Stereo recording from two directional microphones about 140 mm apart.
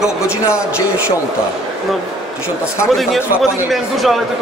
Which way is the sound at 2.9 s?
Centre (ahead or behind).